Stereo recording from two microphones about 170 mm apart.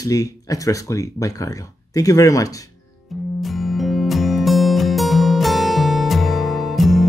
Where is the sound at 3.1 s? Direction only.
Centre (ahead or behind).